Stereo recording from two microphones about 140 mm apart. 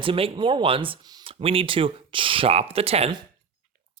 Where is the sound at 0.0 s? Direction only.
40° right (ahead or behind).